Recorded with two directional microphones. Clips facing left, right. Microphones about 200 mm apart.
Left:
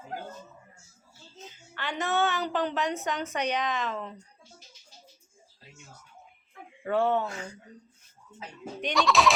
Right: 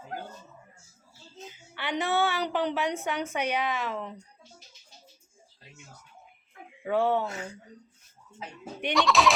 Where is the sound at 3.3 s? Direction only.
10° right (ahead or behind).